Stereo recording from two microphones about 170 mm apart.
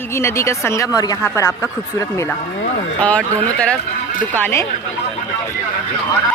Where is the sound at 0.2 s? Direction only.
15° left (ahead or behind).